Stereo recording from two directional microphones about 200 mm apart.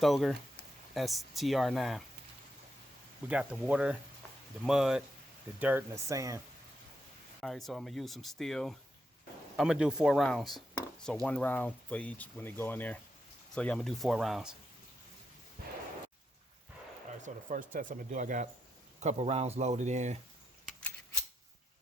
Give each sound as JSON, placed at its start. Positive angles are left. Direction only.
{"t": 0.0, "sound": "speech", "side_deg": 0}
{"t": 3.2, "sound": "speech", "side_deg": -5}
{"t": 7.4, "sound": "speech", "side_deg": 0}
{"t": 17.2, "sound": "speech", "side_deg": -40}